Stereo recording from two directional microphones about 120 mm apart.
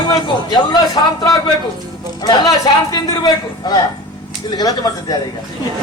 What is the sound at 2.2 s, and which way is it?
Speech, 35° left (ahead or behind).